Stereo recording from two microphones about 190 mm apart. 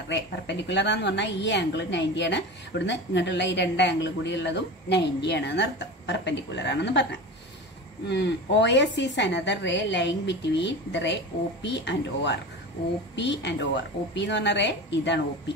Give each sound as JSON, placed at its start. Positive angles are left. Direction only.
{"t": 0.1, "sound": "a woman's voice", "side_deg": 65}
{"t": 8.1, "sound": "a woman's voice", "side_deg": 65}